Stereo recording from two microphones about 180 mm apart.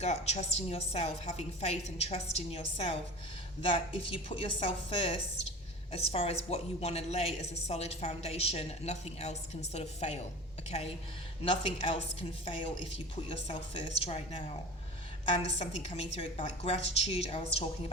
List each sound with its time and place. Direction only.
0.0 s a woman's voice: 40° left (ahead or behind)
15.4 s a woman's voice: 35° left (ahead or behind)